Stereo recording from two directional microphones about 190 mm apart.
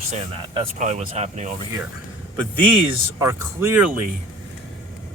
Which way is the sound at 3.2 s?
15° right (ahead or behind).